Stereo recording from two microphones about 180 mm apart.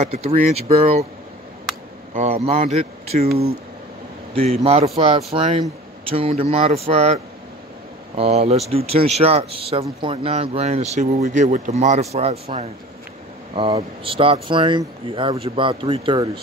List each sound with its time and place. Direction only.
0.0 s speech: 35° right (ahead or behind)
2.1 s speech: 35° right (ahead or behind)
4.9 s speech: 30° right (ahead or behind)
8.2 s speech: 35° right (ahead or behind)